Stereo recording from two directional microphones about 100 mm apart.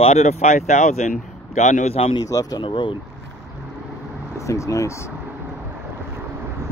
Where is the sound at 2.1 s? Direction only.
40° left (ahead or behind).